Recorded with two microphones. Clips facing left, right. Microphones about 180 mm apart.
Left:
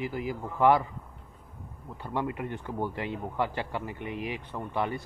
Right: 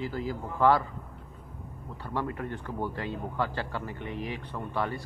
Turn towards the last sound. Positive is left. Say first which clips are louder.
# left 1 dB
turn(degrees=20)  # may be behind; listen again after turning